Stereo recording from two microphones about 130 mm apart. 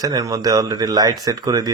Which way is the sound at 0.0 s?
25° right (ahead or behind).